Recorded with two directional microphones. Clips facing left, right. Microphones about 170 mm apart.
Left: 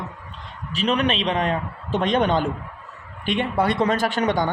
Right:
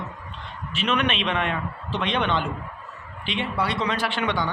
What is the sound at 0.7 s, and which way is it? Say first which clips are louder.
A man's voice: left 3 dB; 35° left (ahead or behind).